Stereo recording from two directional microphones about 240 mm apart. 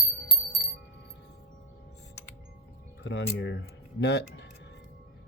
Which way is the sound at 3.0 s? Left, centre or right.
Left.